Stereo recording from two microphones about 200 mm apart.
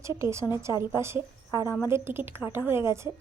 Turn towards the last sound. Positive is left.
turn(degrees=-15)  # may be behind; listen again after turning